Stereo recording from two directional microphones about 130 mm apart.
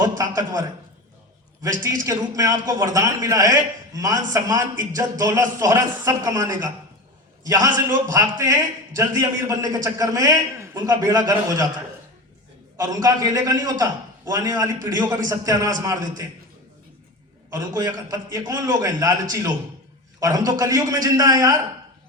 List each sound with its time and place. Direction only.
0.2 s a man's voice: 25° right (ahead or behind)
2.0 s a man's voice: 25° right (ahead or behind)
12.7 s a man's voice: 25° right (ahead or behind)
17.5 s a man's voice: 25° right (ahead or behind)